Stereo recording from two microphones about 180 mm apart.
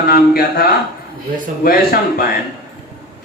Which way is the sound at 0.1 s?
55° left (ahead or behind).